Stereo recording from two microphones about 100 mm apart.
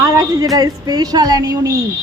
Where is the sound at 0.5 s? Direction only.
40° right (ahead or behind).